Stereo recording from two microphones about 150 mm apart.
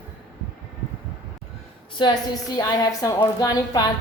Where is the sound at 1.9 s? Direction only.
25° left (ahead or behind).